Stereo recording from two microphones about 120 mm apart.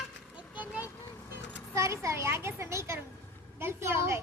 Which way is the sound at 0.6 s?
15° right (ahead or behind).